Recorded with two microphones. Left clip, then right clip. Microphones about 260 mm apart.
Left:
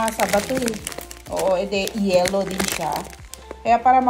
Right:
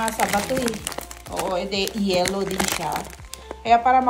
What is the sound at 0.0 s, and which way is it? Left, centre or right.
Speech, centre.